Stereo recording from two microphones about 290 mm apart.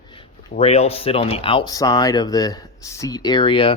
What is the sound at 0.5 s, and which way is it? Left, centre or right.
Speech, left.